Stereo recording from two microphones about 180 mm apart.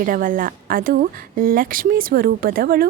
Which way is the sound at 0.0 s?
50° right (ahead or behind).